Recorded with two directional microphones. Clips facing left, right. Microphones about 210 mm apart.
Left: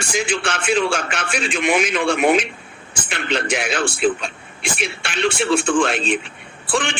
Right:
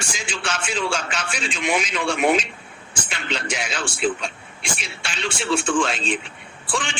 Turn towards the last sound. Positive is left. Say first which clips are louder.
# left 5 dB
turn(degrees=60)  # may be behind; listen again after turning